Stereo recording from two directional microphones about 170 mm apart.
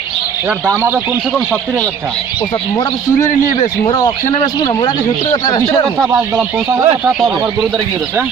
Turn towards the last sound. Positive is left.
turn(degrees=-5)  # may be behind; listen again after turning